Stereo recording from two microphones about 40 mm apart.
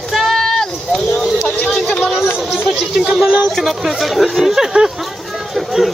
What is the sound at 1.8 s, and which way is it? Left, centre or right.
Chatter, left.